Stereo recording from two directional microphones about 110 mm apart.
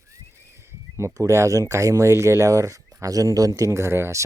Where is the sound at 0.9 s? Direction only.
25° right (ahead or behind).